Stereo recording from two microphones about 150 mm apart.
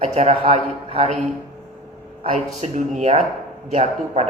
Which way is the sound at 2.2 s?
45° right (ahead or behind).